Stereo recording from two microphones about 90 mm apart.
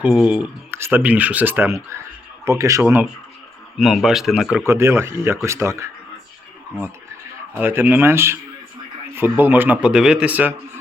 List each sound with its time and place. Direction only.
0.0 s speech: 10° right (ahead or behind); by 2.8 s 35° right (ahead or behind)
2.8 s speech: 20° right (ahead or behind)
3.8 s speech: 5° right (ahead or behind)
4.6 s speech: 30° right (ahead or behind)
7.6 s speech: 25° right (ahead or behind)
9.4 s speech: 20° right (ahead or behind)